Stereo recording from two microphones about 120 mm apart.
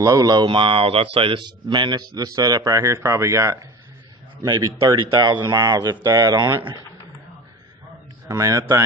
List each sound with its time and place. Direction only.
0.0 s speech: 30° right (ahead or behind)
8.3 s speech: 25° right (ahead or behind)